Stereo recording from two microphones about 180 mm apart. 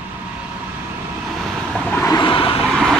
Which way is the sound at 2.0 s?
25° left (ahead or behind).